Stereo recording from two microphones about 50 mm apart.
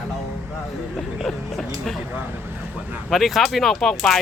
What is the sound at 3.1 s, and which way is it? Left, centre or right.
Speech, centre.